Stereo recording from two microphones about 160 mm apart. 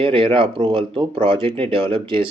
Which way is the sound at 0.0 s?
35° right (ahead or behind).